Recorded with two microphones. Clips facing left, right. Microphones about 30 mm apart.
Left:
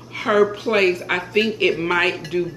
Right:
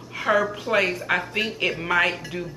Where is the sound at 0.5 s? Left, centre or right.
Centre.